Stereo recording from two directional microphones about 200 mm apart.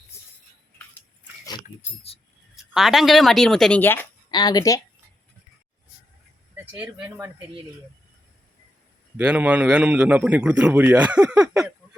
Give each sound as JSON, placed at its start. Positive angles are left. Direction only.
{"t": 0.1, "sound": "music", "side_deg": 15}
{"t": 1.6, "sound": "speech", "side_deg": 35}
{"t": 2.7, "sound": "speech", "side_deg": 0}
{"t": 4.3, "sound": "speech", "side_deg": 20}
{"t": 6.7, "sound": "a man's voice", "side_deg": -5}
{"t": 9.1, "sound": "a man's voice", "side_deg": -10}